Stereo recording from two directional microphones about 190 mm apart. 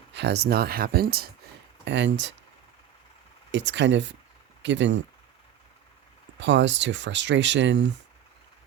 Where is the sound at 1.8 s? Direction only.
70° right (ahead or behind).